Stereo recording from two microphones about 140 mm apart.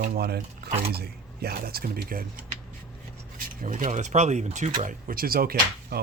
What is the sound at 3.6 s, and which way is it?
Speech, 60° right (ahead or behind).